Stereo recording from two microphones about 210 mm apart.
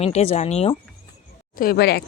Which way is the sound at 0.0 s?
30° left (ahead or behind).